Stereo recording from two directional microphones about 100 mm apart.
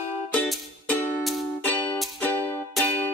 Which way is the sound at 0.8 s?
20° left (ahead or behind).